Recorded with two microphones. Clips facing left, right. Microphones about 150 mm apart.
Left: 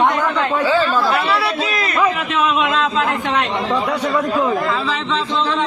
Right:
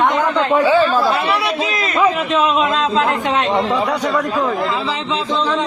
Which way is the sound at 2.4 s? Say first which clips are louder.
Even; 35° right (ahead or behind).